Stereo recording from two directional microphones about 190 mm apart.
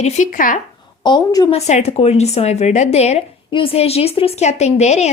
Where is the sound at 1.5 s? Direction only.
35° left (ahead or behind).